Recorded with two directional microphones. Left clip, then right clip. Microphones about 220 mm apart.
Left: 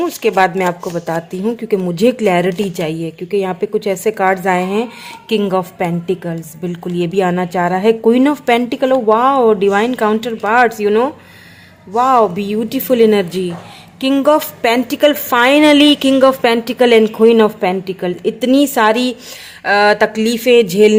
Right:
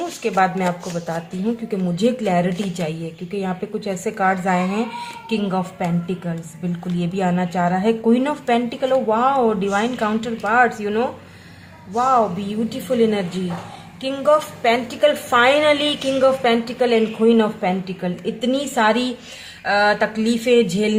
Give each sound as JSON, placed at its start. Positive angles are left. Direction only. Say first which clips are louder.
{"t": 0.2, "sound": "a woman's voice", "louder": "left 5 dB", "side_deg": 45}